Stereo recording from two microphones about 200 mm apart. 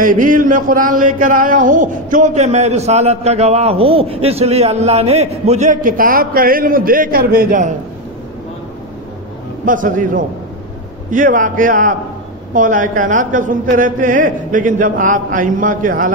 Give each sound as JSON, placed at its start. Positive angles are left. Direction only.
{"t": 0.0, "sound": "speech", "side_deg": -40}
{"t": 9.7, "sound": "speech", "side_deg": -40}